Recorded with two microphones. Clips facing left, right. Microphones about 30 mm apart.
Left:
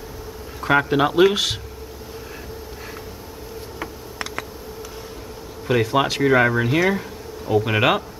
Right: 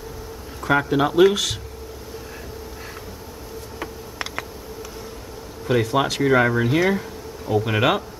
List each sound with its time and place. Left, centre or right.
0.6 s speech: centre
5.7 s speech: centre